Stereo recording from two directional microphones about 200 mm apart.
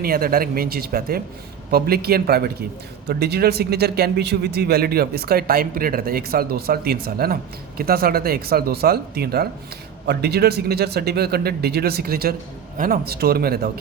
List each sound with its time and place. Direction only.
0.0 s speech: 50° right (ahead or behind)